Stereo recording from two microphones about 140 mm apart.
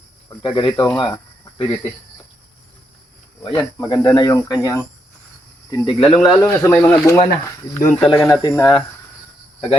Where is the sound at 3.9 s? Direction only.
30° left (ahead or behind).